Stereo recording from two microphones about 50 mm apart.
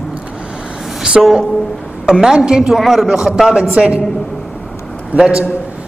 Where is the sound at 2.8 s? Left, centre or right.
Centre.